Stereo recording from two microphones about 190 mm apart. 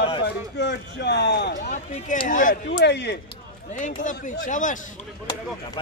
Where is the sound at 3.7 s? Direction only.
40° left (ahead or behind).